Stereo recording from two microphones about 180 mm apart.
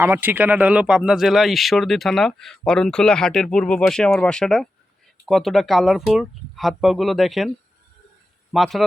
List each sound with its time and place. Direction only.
0.0 s speech: 10° right (ahead or behind)
8.5 s speech: centre (ahead or behind)